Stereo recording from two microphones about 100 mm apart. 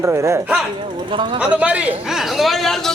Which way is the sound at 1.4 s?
15° right (ahead or behind).